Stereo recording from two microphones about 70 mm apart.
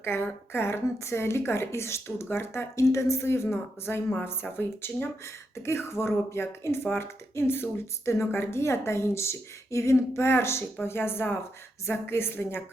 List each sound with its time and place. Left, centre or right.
0.0 s speech: left